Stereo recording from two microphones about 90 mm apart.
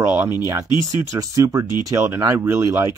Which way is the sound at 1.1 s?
35° right (ahead or behind).